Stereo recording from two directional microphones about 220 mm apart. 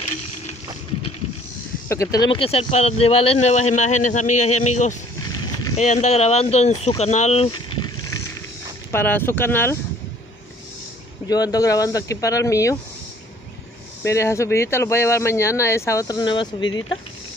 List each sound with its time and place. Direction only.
1.9 s speech: 15° left (ahead or behind)
7.0 s a sound: 30° left (ahead or behind)
8.9 s speech: 10° left (ahead or behind)
11.2 s speech: 15° left (ahead or behind)
14.0 s speech: 15° left (ahead or behind)